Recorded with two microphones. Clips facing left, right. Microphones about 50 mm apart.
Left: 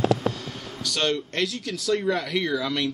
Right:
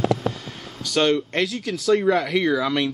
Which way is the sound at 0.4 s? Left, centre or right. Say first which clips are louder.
Left 1 dB; right.